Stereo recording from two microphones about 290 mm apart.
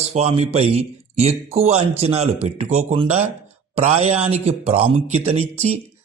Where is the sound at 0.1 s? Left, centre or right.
Right.